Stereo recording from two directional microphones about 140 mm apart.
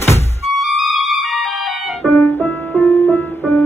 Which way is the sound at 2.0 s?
15° left (ahead or behind).